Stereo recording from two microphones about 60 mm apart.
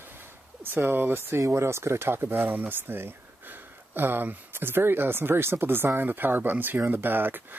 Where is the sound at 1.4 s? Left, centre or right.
Right.